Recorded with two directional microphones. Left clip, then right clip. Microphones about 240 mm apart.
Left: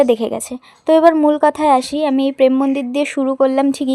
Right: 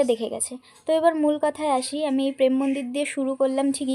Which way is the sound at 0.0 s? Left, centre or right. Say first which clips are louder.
Left 9 dB; left.